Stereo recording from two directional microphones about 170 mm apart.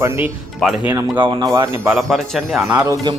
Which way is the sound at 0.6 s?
5° left (ahead or behind).